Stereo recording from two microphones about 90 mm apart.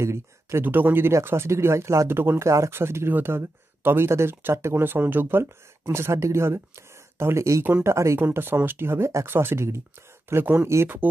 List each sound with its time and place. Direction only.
0.0 s speech: 30° right (ahead or behind)
10.7 s speech: 30° right (ahead or behind)